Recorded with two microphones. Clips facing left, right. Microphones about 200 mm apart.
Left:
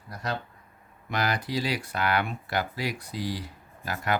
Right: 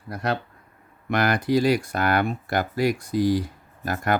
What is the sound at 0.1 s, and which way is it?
Speech, 60° right (ahead or behind).